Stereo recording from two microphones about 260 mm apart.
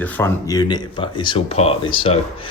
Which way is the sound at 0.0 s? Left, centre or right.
Centre.